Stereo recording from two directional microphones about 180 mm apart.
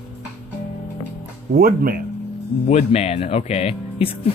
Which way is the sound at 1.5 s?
55° right (ahead or behind).